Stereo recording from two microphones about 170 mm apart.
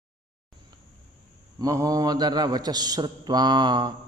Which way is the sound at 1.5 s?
20° right (ahead or behind).